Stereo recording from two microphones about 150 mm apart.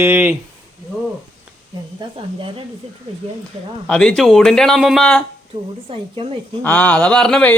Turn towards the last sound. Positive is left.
turn(degrees=5)  # may be behind; listen again after turning